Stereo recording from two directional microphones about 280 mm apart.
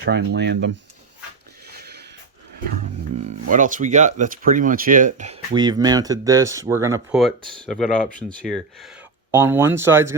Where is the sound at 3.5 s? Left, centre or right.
Right; by 7.2 s centre.